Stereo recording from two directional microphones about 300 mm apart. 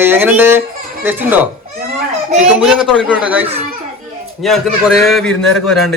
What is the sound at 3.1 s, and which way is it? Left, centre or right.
Speech, centre.